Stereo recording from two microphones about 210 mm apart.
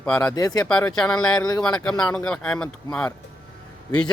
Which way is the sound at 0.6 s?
5° left (ahead or behind).